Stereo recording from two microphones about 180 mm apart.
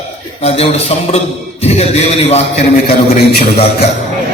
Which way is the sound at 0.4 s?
35° left (ahead or behind).